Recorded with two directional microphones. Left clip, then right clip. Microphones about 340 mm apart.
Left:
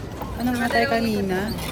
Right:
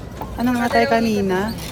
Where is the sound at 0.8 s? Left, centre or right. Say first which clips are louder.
Right 6 dB; centre.